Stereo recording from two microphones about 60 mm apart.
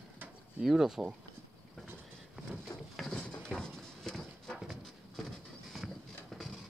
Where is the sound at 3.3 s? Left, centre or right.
Centre.